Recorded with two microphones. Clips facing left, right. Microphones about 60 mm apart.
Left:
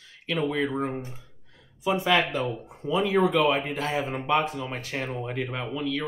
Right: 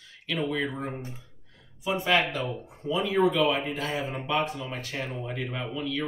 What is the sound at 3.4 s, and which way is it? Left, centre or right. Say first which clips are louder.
Speech: left 2 dB; left.